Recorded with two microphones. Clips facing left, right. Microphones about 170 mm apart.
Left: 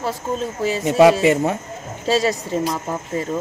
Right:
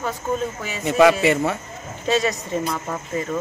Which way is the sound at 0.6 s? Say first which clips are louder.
Left 4 dB; 35° left (ahead or behind).